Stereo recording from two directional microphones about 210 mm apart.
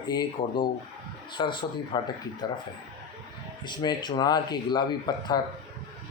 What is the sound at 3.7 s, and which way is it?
Speech, 20° left (ahead or behind).